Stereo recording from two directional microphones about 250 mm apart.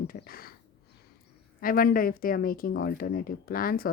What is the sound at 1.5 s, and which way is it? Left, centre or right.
Speech, left.